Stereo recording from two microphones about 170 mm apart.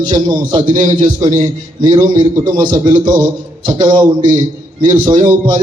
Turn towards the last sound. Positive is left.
turn(degrees=-25)  # may be behind; listen again after turning